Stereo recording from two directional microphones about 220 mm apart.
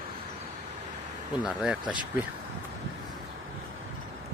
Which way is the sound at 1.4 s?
5° right (ahead or behind).